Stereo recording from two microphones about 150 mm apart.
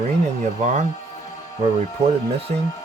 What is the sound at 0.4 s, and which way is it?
Speech, 55° right (ahead or behind).